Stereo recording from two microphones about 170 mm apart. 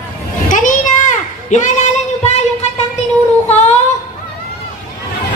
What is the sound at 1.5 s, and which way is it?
Speech, 45° left (ahead or behind).